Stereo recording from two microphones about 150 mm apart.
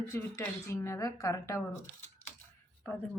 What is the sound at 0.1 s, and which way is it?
A woman's voice, 20° left (ahead or behind).